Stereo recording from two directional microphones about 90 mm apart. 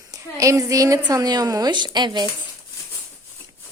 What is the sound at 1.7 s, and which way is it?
Speech, 55° right (ahead or behind).